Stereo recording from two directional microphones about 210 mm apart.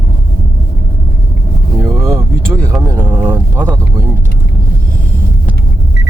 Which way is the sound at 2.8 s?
10° right (ahead or behind).